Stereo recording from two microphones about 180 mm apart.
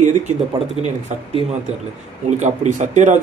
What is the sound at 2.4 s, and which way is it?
Speech, 40° right (ahead or behind).